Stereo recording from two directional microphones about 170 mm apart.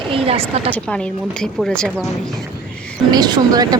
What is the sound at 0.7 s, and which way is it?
Speech, 5° left (ahead or behind).